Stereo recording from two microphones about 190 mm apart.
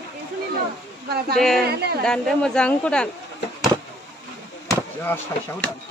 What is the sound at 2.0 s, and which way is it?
Speech, 5° left (ahead or behind).